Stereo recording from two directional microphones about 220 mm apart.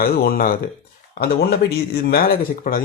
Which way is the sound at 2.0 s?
40° left (ahead or behind).